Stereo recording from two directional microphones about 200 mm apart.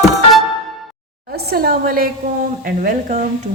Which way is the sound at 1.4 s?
45° right (ahead or behind).